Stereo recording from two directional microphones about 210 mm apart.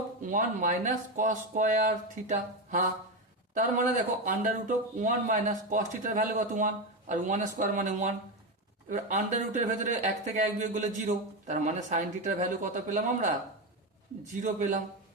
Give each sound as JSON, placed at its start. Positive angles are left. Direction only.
{"t": 0.2, "sound": "speech", "side_deg": -40}
{"t": 14.4, "sound": "speech", "side_deg": -35}